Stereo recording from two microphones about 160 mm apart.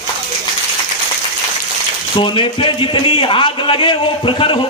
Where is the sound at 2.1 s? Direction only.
30° left (ahead or behind).